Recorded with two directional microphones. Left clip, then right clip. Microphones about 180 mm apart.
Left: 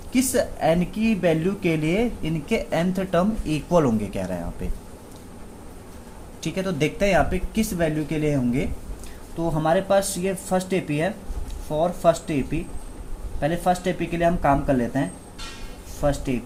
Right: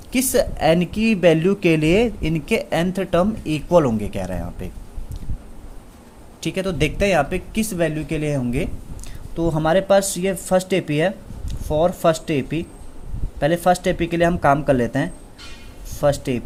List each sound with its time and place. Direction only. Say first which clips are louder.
0.1 s speech: right 3 dB; 45° right (ahead or behind)
6.4 s speech: right 3 dB; 40° right (ahead or behind)
9.4 s speech: right 3 dB; 55° right (ahead or behind)